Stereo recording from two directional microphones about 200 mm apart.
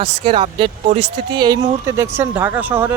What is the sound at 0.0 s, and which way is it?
Speech, 30° right (ahead or behind).